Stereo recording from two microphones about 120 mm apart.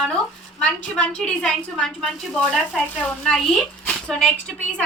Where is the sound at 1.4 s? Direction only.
5° left (ahead or behind).